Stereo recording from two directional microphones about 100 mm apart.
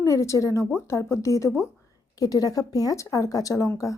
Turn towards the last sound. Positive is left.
turn(degrees=35)  # may be behind; listen again after turning